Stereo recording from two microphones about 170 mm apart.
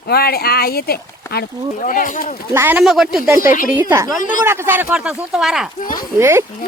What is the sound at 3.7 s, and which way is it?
Speech, 10° right (ahead or behind).